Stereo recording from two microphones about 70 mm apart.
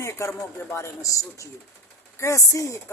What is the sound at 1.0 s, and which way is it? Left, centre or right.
Speech, left.